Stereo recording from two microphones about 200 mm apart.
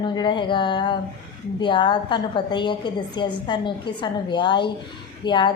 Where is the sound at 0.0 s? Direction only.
25° left (ahead or behind).